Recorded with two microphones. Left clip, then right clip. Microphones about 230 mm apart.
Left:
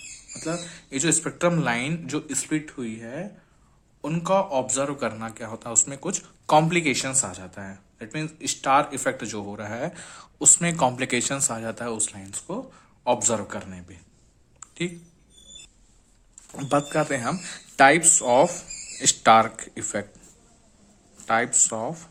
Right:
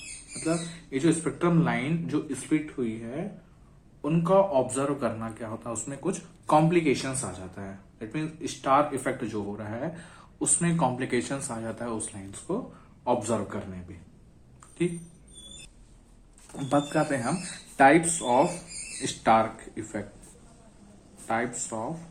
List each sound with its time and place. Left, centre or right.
0.4 s speech: left
16.6 s speech: left
17.7 s speech: left
21.2 s speech: left